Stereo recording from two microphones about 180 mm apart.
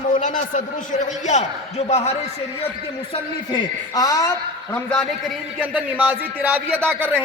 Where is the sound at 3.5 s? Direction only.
20° left (ahead or behind).